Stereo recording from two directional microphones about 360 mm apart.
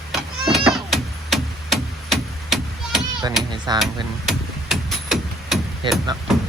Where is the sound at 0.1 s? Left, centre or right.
Centre.